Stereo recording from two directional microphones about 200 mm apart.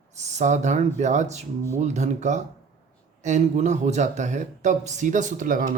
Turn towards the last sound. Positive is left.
turn(degrees=-40)  # may be behind; listen again after turning